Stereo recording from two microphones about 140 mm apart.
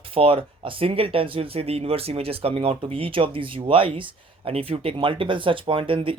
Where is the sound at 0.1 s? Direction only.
40° right (ahead or behind).